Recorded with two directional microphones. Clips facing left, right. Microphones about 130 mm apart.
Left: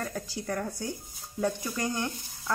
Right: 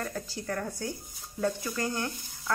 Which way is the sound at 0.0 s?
10° left (ahead or behind).